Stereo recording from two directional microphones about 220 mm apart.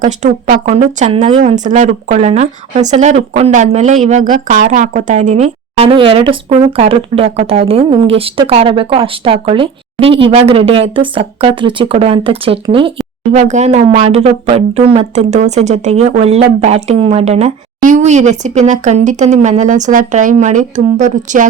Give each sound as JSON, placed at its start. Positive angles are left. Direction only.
{"t": 0.0, "sound": "speech", "side_deg": -35}